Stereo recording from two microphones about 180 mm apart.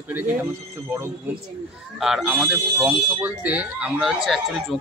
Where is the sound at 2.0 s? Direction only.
5° right (ahead or behind).